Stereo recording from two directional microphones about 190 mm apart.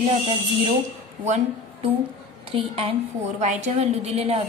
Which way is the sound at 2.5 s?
30° right (ahead or behind).